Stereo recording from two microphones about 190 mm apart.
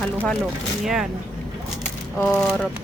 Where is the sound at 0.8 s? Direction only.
5° right (ahead or behind).